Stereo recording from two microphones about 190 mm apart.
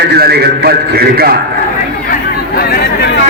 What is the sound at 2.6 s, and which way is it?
Chatter, 55° left (ahead or behind).